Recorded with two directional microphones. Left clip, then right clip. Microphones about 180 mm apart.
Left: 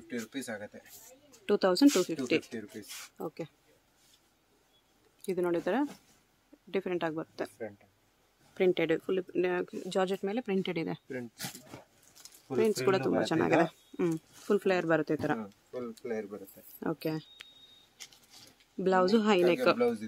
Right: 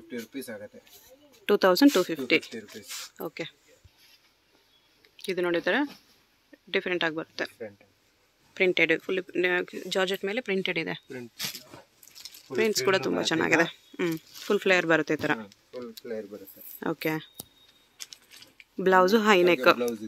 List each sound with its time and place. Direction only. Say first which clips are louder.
0.1 s speech: right 1 dB; 15° left (ahead or behind)
1.4 s speech: right 5 dB; 10° right (ahead or behind)
5.2 s speech: right 4 dB; 5° left (ahead or behind)
6.7 s speech: right 6 dB; centre (ahead or behind)
8.5 s speech: right 5 dB; 10° left (ahead or behind)
12.5 s speech: right 3 dB; 25° left (ahead or behind)
12.8 s speech: right 3 dB; centre (ahead or behind)
15.7 s speech: right 1 dB; 40° left (ahead or behind)
16.8 s speech: right 5 dB; 5° right (ahead or behind)
18.8 s speech: right 6 dB; 10° right (ahead or behind)